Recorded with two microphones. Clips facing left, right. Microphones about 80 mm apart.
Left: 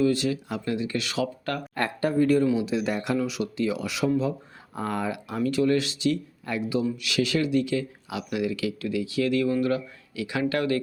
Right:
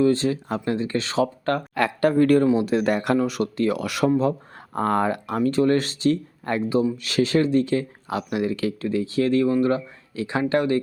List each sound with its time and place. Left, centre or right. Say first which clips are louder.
0.0 s speech: right 4 dB; right
1.7 s speech: right 4 dB; right
5.4 s speech: right 3 dB; right